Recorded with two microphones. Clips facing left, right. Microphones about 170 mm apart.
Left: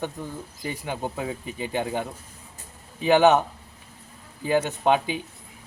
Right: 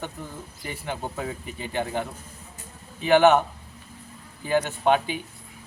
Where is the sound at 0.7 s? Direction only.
15° left (ahead or behind).